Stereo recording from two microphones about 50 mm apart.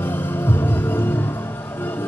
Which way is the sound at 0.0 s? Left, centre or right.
Left.